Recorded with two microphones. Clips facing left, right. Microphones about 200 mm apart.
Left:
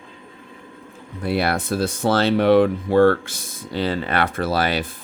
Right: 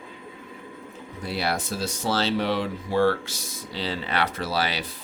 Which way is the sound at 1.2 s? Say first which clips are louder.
Left 6 dB; 55° left (ahead or behind).